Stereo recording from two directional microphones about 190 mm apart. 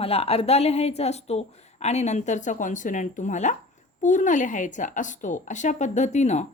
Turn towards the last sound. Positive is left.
turn(degrees=40)  # may be behind; listen again after turning